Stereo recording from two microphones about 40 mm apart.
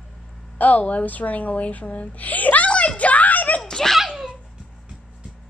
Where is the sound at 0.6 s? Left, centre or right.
Left.